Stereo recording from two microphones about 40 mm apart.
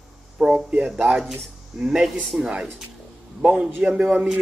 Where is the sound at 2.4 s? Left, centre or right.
Right.